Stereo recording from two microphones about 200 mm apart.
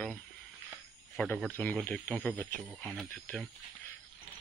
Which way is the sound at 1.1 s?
5° left (ahead or behind).